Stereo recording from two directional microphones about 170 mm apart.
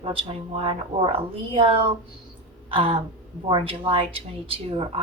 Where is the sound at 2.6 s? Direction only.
35° right (ahead or behind).